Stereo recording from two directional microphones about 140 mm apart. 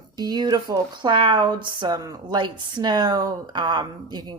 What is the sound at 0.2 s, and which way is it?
Speech, 30° right (ahead or behind).